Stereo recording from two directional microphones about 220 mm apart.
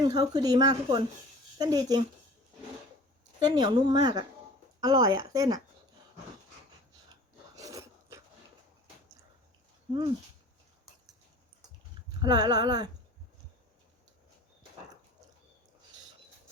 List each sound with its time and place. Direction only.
0.0 s speech: 20° right (ahead or behind)
3.4 s speech: 20° right (ahead or behind)
7.5 s a sound: 15° right (ahead or behind)
12.2 s speech: 20° right (ahead or behind)